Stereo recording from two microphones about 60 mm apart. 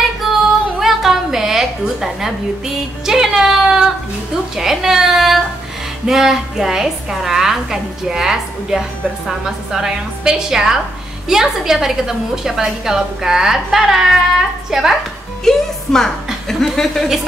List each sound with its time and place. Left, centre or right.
0.2 s a sound: centre
6.0 s a woman's voice: centre
15.4 s speech: centre